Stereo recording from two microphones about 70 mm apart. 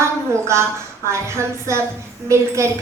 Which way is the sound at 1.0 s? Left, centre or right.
Right.